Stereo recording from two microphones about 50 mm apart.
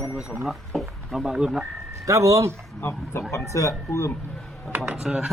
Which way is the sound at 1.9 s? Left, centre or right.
Right.